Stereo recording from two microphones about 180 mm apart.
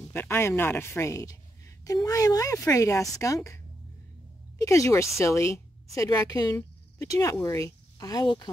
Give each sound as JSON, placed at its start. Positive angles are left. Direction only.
{"t": 0.1, "sound": "a woman's voice", "side_deg": 15}